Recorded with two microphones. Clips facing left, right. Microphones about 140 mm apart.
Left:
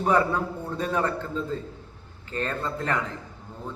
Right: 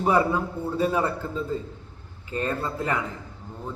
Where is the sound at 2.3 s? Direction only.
10° right (ahead or behind).